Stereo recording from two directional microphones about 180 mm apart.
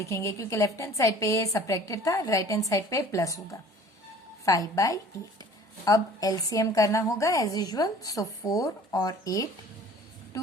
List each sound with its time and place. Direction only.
0.0 s a woman's voice: 15° left (ahead or behind)